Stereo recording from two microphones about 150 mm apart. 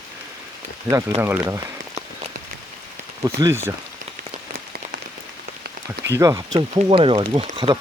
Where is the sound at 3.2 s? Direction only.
20° right (ahead or behind).